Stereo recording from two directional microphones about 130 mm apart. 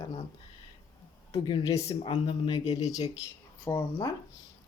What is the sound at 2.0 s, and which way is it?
Speech, 40° left (ahead or behind).